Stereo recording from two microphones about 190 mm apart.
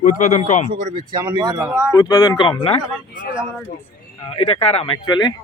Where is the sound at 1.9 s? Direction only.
20° left (ahead or behind).